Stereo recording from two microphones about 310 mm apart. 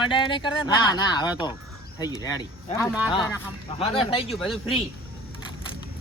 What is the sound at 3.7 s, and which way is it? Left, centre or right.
Speech, centre.